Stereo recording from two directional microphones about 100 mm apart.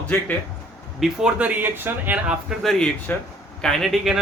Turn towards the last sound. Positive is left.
turn(degrees=0)  # may be behind; listen again after turning